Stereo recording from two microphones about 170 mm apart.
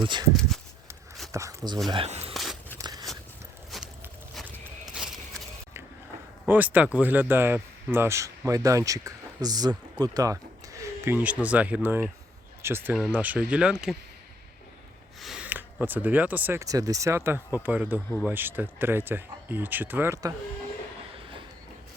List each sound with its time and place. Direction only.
0.0 s speech: 25° right (ahead or behind)
1.3 s speech: 20° right (ahead or behind)
1.9 s speech: 35° right (ahead or behind)
2.3 s biting: centre (ahead or behind)
2.7 s a sound: 20° right (ahead or behind)
3.7 s a sound: centre (ahead or behind)
6.5 s speech: 10° right (ahead or behind)
15.2 s speech: 5° right (ahead or behind)